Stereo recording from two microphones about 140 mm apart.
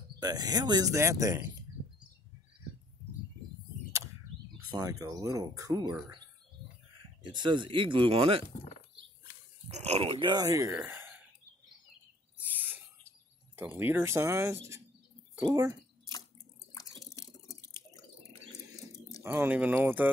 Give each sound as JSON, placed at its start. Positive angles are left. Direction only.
{"t": 0.2, "sound": "speech", "side_deg": -30}
{"t": 4.7, "sound": "speech", "side_deg": -25}
{"t": 7.2, "sound": "speech", "side_deg": -35}
{"t": 9.7, "sound": "speech", "side_deg": -50}
{"t": 12.4, "sound": "a sound", "side_deg": -10}
{"t": 13.6, "sound": "speech", "side_deg": -15}
{"t": 16.7, "sound": "drip", "side_deg": 25}
{"t": 19.2, "sound": "speech", "side_deg": -15}